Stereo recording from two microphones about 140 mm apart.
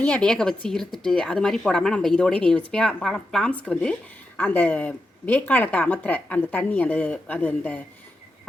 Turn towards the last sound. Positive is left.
turn(degrees=10)  # may be behind; listen again after turning